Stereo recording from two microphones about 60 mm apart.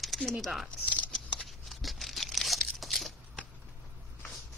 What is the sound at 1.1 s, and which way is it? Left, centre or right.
Scissors, centre.